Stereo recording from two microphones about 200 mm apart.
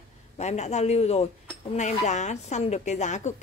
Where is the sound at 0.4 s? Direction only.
35° left (ahead or behind).